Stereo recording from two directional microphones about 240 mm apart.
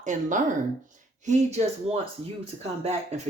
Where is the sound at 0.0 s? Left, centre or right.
Right.